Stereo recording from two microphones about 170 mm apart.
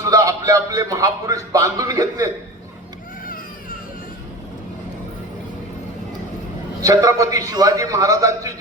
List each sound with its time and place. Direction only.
0.1 s a man's voice: 20° right (ahead or behind)
6.8 s a man's voice: 20° right (ahead or behind)